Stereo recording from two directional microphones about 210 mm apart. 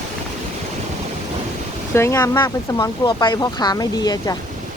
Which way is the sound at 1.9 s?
15° left (ahead or behind).